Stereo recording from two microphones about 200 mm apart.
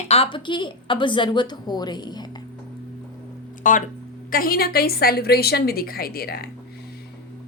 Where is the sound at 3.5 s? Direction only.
40° left (ahead or behind).